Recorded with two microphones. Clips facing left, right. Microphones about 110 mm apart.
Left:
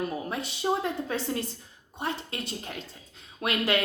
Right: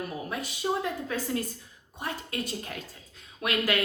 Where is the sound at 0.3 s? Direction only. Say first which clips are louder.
Even; 25° left (ahead or behind).